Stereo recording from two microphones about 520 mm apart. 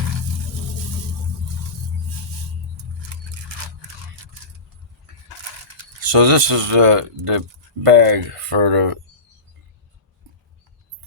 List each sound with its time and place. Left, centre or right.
6.0 s speech: right
7.9 s speech: right